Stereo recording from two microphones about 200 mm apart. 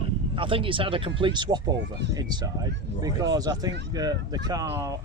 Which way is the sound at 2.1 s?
20° right (ahead or behind).